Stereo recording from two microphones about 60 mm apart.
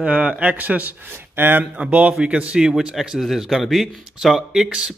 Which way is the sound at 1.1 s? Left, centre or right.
Right.